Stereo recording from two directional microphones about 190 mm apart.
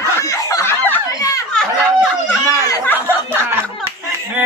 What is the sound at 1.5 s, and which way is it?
A woman's voice, 5° left (ahead or behind).